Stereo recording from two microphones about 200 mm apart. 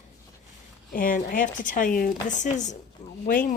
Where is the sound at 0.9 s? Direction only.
45° left (ahead or behind).